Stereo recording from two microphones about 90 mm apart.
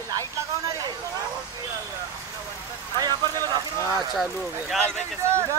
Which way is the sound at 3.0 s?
45° right (ahead or behind).